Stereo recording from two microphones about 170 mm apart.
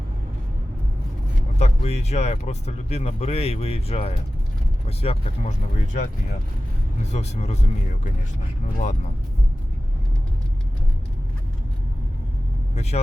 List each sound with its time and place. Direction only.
1.5 s speech: 40° left (ahead or behind)
7.1 s speech: 40° left (ahead or behind)
12.7 s speech: 40° left (ahead or behind)